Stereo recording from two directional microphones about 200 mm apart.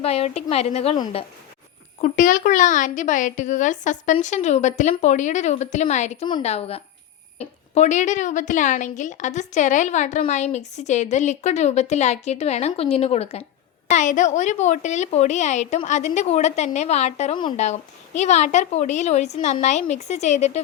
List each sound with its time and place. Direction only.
0.0 s a woman's voice: 30° left (ahead or behind)
2.0 s a woman's voice: 40° left (ahead or behind)